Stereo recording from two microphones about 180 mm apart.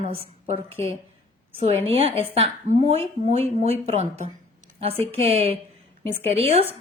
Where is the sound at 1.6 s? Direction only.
35° right (ahead or behind).